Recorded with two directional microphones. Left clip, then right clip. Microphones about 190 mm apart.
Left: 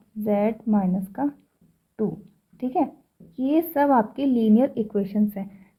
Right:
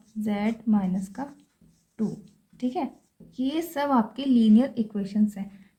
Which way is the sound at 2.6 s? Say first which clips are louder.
Left 5 dB; 40° left (ahead or behind).